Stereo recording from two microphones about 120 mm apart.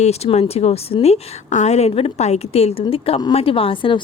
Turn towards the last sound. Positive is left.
turn(degrees=45)  # may be behind; listen again after turning